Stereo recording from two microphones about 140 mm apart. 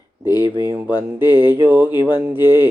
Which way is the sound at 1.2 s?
15° right (ahead or behind).